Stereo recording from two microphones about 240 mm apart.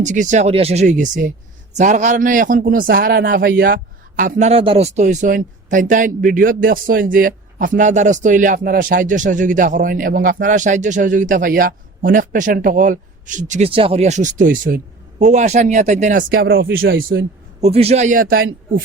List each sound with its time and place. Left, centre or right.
0.0 s speech: right
16.9 s a man's voice: right
17.6 s speech: right